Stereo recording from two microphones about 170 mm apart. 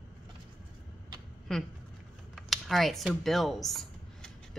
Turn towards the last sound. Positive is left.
turn(degrees=0)  # may be behind; listen again after turning